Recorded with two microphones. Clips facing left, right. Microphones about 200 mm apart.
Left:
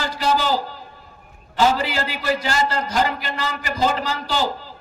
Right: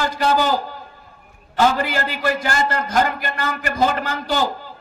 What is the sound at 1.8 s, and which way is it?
A man's voice, 50° right (ahead or behind).